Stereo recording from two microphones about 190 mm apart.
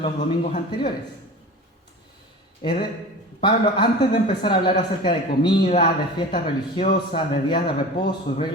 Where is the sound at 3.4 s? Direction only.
25° left (ahead or behind).